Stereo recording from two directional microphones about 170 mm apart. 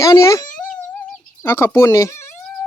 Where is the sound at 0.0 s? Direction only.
20° left (ahead or behind).